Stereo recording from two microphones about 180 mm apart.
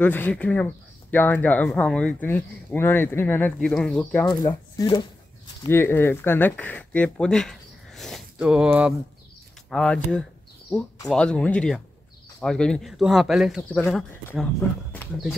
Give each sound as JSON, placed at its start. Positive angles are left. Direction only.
{"t": 0.0, "sound": "speech", "side_deg": 10}
{"t": 4.3, "sound": "speech", "side_deg": 20}
{"t": 9.7, "sound": "speech", "side_deg": 5}